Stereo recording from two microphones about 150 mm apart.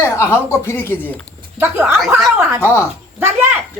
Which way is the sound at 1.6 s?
15° right (ahead or behind).